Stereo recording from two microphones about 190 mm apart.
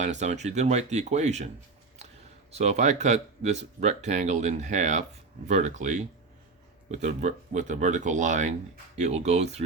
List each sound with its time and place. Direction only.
0.0 s speech: 35° right (ahead or behind)
2.6 s speech: 35° right (ahead or behind)